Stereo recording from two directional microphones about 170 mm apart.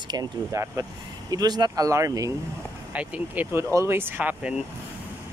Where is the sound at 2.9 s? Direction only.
10° right (ahead or behind).